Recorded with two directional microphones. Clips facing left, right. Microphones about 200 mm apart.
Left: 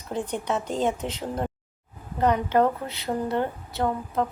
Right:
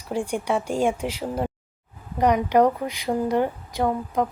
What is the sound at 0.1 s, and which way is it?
A woman's voice, 10° right (ahead or behind).